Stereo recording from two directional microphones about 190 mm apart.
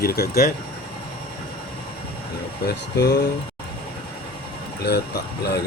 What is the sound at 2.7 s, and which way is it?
Speech, 60° left (ahead or behind).